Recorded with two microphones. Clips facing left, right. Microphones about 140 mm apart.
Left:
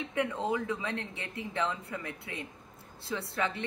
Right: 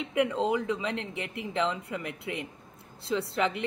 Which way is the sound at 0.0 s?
20° right (ahead or behind).